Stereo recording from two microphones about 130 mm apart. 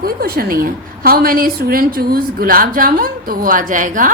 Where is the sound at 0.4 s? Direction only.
90° right.